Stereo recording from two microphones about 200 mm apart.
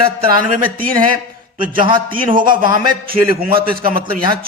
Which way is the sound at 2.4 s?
45° right (ahead or behind).